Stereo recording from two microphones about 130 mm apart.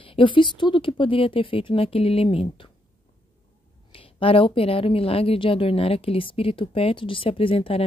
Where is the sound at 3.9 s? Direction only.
45° left (ahead or behind).